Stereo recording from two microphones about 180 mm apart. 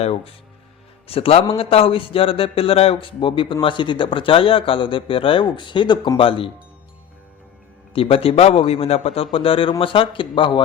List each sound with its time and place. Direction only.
0.0 s a man's voice: 35° left (ahead or behind)
7.9 s a man's voice: 30° left (ahead or behind)